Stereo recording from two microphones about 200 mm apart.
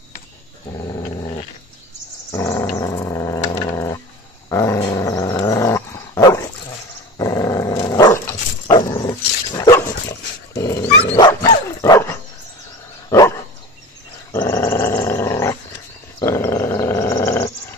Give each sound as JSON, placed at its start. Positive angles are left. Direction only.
{"t": 0.7, "sound": "dog", "side_deg": 20}
{"t": 2.3, "sound": "dog", "side_deg": 15}
{"t": 2.8, "sound": "purr", "side_deg": 15}
{"t": 3.7, "sound": "dog", "side_deg": 15}
{"t": 14.3, "sound": "dog", "side_deg": 15}